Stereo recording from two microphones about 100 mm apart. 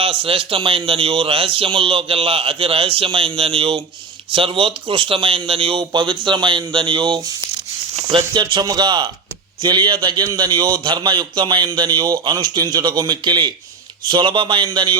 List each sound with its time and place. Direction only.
0.0 s speech: 65° right (ahead or behind); by 7.2 s 50° right (ahead or behind)
8.3 s a man's voice: 50° right (ahead or behind)